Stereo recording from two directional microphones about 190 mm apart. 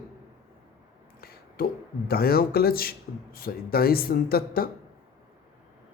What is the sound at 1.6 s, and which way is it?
Speech, 50° left (ahead or behind).